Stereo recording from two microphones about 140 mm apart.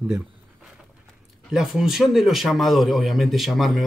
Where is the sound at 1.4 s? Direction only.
5° right (ahead or behind).